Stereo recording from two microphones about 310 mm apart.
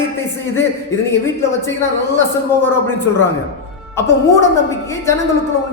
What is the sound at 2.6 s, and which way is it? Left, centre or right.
A man's voice, centre.